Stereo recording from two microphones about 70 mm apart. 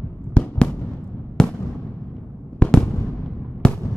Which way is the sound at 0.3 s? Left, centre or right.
Centre.